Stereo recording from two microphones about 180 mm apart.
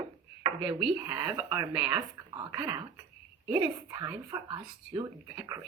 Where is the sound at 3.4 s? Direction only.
10° right (ahead or behind).